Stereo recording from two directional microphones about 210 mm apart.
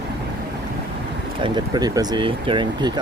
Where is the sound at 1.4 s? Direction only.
20° right (ahead or behind).